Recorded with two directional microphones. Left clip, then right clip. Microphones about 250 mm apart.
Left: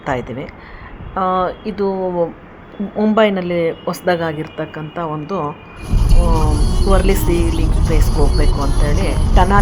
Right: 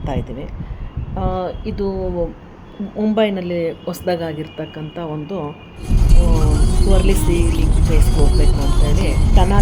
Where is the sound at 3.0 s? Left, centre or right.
Centre.